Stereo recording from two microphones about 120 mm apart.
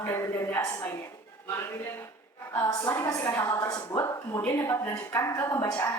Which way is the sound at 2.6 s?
25° left (ahead or behind).